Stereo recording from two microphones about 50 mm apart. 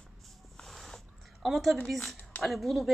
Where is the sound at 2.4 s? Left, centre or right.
Centre.